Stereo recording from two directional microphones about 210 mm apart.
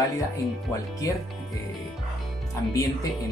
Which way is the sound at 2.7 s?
15° left (ahead or behind).